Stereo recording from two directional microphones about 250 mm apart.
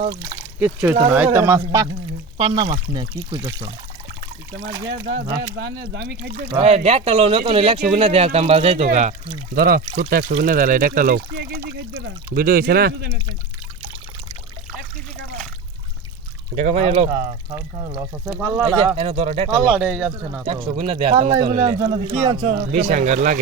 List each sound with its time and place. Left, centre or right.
0.0 s speech: centre
0.6 s speech: centre
5.1 s speech: centre
5.8 s speech: right
6.5 s speech: right
16.6 s speech: right
18.3 s speech: centre
18.9 s speech: right
19.7 s speech: centre
20.4 s speech: right